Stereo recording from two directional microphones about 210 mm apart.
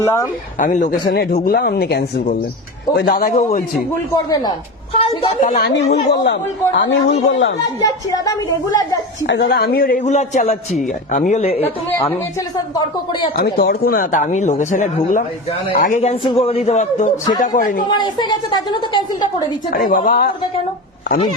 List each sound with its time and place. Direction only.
0.0 s speech: 10° left (ahead or behind)
0.6 s a man's voice: 35° left (ahead or behind)
4.1 s a woman's voice: 20° left (ahead or behind)
5.5 s a woman's voice: 50° left (ahead or behind)
7.8 s speech: 15° left (ahead or behind)
9.2 s a man's voice: 55° left (ahead or behind); by 11.6 s 30° left (ahead or behind)
11.6 s speech: 10° left (ahead or behind)
12.7 s a woman's voice: 20° left (ahead or behind)
13.3 s speech: 50° left (ahead or behind)
17.8 s a woman's voice: 20° left (ahead or behind)
19.7 s speech: 40° left (ahead or behind)